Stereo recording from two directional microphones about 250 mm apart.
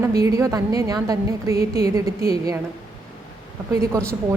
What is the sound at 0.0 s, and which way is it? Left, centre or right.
A woman's voice, centre.